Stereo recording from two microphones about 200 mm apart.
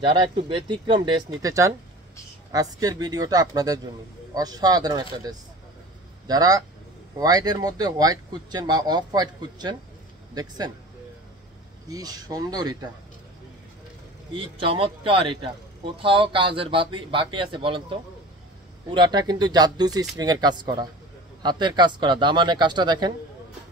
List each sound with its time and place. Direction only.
0.0 s speech: 25° right (ahead or behind)
6.2 s speech: 20° right (ahead or behind)
11.9 s speech: 20° right (ahead or behind)
14.3 s speech: 25° right (ahead or behind)